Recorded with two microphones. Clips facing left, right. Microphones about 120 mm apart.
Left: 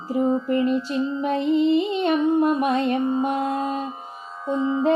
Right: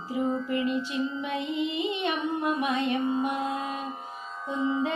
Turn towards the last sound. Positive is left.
turn(degrees=35)  # may be behind; listen again after turning